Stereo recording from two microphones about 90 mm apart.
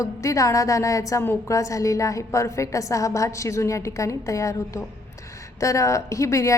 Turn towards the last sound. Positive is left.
turn(degrees=35)  # may be behind; listen again after turning